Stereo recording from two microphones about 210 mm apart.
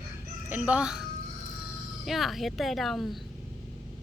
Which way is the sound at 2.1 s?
Centre (ahead or behind).